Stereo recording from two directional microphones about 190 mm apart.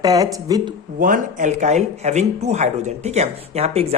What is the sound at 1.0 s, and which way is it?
Speech, 45° right (ahead or behind).